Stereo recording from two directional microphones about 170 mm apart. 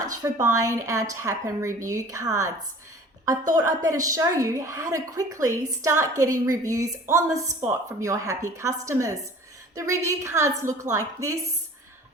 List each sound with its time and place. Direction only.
0.0 s a woman's voice: 20° right (ahead or behind)